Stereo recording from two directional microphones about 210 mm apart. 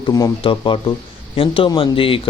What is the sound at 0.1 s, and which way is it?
A man's voice, 20° left (ahead or behind).